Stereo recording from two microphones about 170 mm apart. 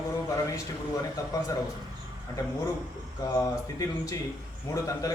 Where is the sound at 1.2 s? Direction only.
20° left (ahead or behind).